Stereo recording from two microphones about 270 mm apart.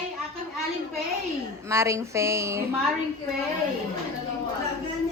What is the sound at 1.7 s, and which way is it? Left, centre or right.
Speech, centre.